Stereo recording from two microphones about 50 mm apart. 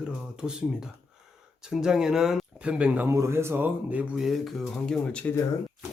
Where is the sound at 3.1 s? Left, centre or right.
Right.